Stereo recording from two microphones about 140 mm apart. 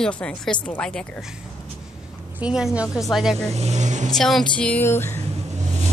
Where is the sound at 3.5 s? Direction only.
55° right (ahead or behind).